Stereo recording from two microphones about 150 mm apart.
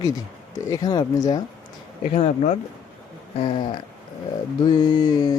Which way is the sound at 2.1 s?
40° left (ahead or behind).